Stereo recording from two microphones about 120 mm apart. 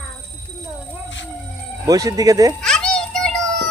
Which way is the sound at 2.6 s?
5° left (ahead or behind).